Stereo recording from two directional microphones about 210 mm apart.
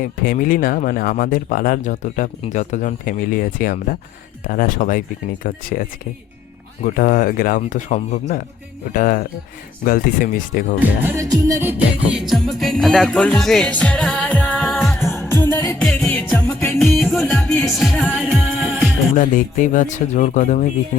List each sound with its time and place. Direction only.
0.0 s speech: 40° left (ahead or behind)
10.8 s music: 10° right (ahead or behind)
15.3 s music: 10° left (ahead or behind)
19.1 s speech: 40° left (ahead or behind)